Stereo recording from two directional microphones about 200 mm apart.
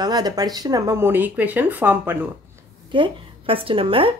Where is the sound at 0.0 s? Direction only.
20° right (ahead or behind).